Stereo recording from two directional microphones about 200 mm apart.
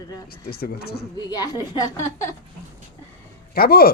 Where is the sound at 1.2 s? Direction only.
20° left (ahead or behind).